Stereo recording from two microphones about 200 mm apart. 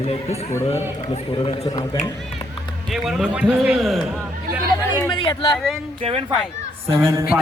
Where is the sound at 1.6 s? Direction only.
20° left (ahead or behind).